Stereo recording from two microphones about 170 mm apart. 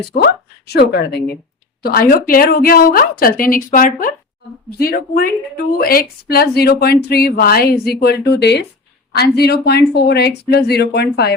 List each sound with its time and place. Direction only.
0.7 s speech: 75° left (ahead or behind)
1.8 s a woman's voice: 60° left (ahead or behind); by 8.6 s 85° left
9.1 s speech: 70° left (ahead or behind)